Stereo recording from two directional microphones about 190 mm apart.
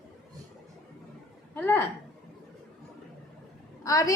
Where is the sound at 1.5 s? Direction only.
10° left (ahead or behind).